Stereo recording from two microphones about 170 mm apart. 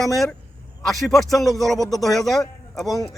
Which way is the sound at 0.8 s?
Centre (ahead or behind).